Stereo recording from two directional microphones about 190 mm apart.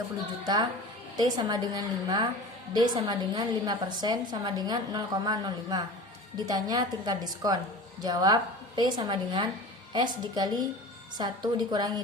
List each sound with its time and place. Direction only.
0.4 s a woman's voice: 20° right (ahead or behind)